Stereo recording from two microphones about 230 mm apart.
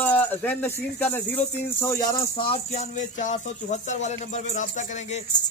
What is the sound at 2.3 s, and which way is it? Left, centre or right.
Speech, left.